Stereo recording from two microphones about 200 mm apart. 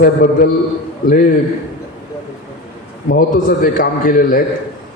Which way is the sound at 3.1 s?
45° left (ahead or behind).